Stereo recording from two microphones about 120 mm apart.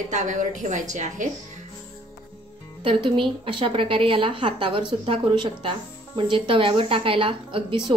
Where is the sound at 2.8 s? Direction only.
45° right (ahead or behind).